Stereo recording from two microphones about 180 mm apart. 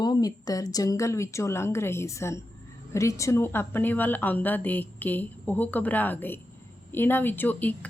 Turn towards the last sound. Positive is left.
turn(degrees=10)  # may be behind; listen again after turning